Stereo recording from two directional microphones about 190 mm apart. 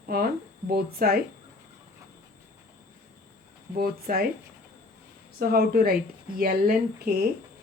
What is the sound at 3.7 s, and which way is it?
Speech, 55° right (ahead or behind).